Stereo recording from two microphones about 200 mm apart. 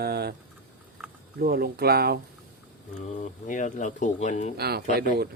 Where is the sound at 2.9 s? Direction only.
40° left (ahead or behind).